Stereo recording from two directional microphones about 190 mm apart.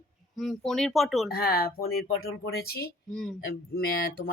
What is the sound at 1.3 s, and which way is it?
Speech, 50° left (ahead or behind).